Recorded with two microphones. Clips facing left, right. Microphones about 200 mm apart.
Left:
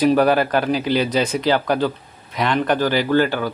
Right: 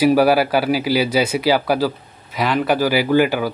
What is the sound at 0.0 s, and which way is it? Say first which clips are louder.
Speech: right 2 dB; 5° right (ahead or behind).